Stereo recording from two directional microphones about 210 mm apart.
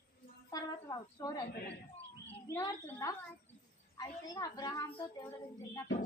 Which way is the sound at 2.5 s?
15° left (ahead or behind).